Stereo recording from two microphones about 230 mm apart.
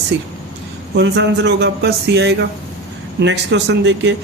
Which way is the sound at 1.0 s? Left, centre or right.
Right.